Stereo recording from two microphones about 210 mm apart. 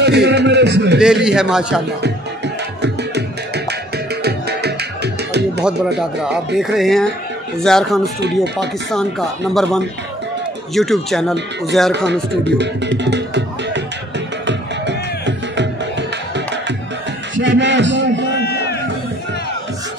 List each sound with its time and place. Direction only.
0.0 s a sound: 55° right (ahead or behind)
0.9 s speech: 5° right (ahead or behind)
2.0 s music: 55° right (ahead or behind)
5.9 s speech: centre (ahead or behind)
12.1 s speech: 55° right (ahead or behind)
14.4 s music: 55° right (ahead or behind)
18.4 s music: 50° left (ahead or behind)